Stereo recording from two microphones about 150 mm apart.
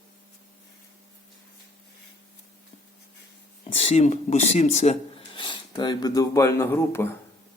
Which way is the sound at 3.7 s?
40° left (ahead or behind).